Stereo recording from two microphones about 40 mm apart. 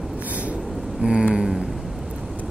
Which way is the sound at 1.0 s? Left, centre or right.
Centre.